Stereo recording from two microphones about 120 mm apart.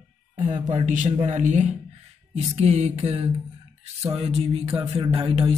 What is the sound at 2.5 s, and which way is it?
Music, 65° right (ahead or behind).